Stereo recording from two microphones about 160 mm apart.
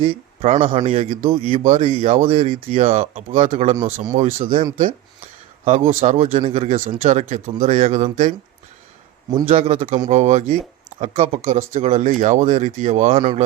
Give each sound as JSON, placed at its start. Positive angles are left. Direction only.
{"t": 0.0, "sound": "a man's voice", "side_deg": -35}
{"t": 5.6, "sound": "speech", "side_deg": -40}
{"t": 9.5, "sound": "a man's voice", "side_deg": -40}